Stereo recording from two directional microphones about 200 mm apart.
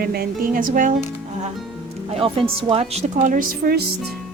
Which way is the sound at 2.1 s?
25° right (ahead or behind).